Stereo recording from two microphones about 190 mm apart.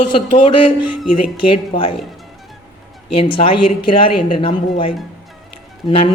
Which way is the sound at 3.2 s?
30° left (ahead or behind).